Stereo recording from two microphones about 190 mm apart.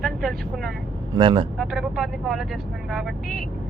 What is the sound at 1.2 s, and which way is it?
Speech, 25° right (ahead or behind).